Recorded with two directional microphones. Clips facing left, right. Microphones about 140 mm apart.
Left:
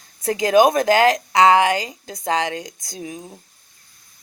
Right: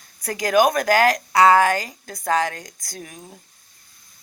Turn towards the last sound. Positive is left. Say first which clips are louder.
# left 6 dB
turn(degrees=20)  # may be behind; listen again after turning